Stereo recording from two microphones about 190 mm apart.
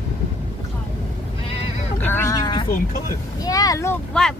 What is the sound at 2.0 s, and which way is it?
Speech, 15° left (ahead or behind).